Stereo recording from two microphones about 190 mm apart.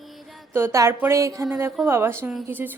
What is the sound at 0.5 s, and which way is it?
A woman's voice, 15° right (ahead or behind).